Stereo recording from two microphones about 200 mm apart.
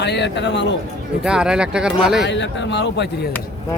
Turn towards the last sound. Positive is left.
turn(degrees=60)  # may be behind; listen again after turning